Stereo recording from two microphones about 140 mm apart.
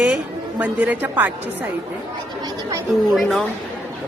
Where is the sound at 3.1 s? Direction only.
Centre (ahead or behind).